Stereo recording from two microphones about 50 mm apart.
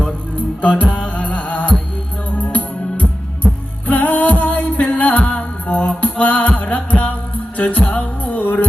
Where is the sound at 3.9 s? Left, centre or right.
Left.